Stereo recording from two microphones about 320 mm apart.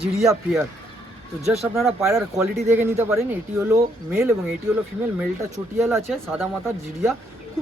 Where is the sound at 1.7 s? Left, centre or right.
Centre.